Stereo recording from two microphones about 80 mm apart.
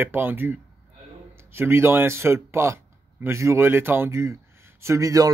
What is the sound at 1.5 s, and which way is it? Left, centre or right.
Speech, right.